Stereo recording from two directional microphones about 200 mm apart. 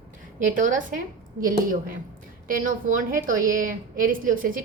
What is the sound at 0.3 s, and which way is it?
A woman's voice, 40° right (ahead or behind).